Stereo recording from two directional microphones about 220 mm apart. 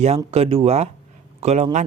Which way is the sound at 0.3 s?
25° right (ahead or behind).